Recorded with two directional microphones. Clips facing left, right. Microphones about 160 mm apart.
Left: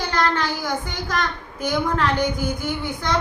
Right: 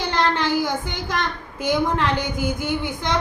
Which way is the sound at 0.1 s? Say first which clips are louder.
Right 2 dB; 25° right (ahead or behind).